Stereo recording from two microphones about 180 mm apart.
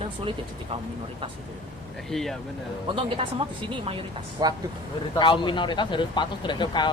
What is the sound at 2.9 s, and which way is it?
Speech, 30° right (ahead or behind).